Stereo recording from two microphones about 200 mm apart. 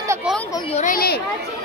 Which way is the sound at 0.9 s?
50° left (ahead or behind).